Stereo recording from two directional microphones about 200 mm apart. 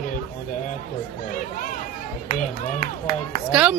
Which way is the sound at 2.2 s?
40° left (ahead or behind).